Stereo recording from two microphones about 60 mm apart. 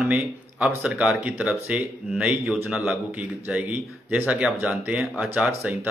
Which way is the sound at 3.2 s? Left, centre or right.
Right.